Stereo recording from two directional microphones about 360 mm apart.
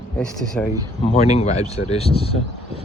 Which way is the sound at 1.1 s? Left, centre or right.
Centre.